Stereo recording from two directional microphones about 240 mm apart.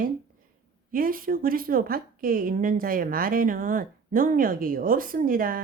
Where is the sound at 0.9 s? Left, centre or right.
Right.